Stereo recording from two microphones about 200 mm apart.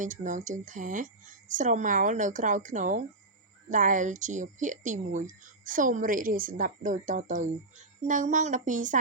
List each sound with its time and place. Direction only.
0.0 s speech: 40° right (ahead or behind)